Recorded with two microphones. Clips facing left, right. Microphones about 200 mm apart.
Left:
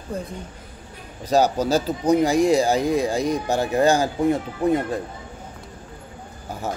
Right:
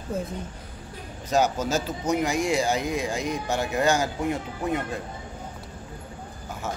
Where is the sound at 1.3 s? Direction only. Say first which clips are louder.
Left 5 dB; 35° left (ahead or behind).